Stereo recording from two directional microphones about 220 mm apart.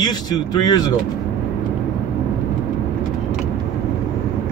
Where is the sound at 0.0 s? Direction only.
20° left (ahead or behind).